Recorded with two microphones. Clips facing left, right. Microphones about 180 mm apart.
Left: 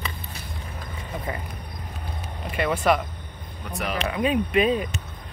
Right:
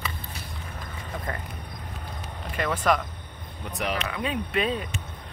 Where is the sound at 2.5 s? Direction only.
10° left (ahead or behind).